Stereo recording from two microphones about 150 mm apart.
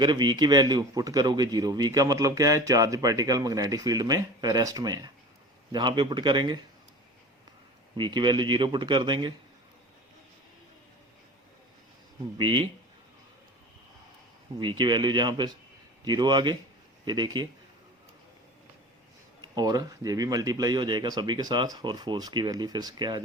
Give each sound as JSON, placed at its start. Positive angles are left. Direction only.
{"t": 0.0, "sound": "a man's voice", "side_deg": -30}
{"t": 7.9, "sound": "speech", "side_deg": -30}
{"t": 12.4, "sound": "speech", "side_deg": -30}
{"t": 14.6, "sound": "a man's voice", "side_deg": -30}
{"t": 19.5, "sound": "a man's voice", "side_deg": -25}